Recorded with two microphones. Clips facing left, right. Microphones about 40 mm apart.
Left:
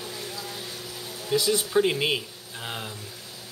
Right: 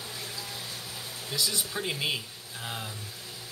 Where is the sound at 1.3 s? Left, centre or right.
Left.